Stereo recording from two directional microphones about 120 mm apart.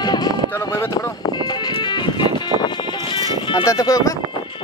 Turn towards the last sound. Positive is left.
turn(degrees=30)  # may be behind; listen again after turning